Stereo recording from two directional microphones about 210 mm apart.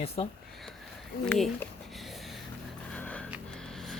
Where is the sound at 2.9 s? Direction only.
5° left (ahead or behind).